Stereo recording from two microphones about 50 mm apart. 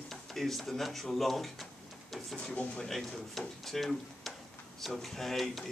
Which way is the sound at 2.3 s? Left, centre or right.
Left.